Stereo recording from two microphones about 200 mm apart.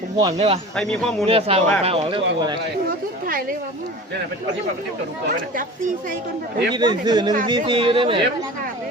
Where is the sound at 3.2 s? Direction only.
45° right (ahead or behind).